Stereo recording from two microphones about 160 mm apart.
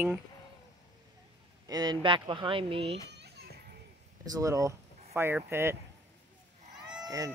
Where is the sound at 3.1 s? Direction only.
90° right.